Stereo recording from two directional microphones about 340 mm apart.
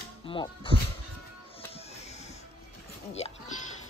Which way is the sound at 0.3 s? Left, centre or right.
Centre.